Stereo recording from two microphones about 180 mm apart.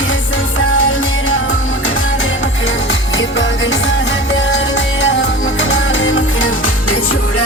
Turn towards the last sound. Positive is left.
turn(degrees=90)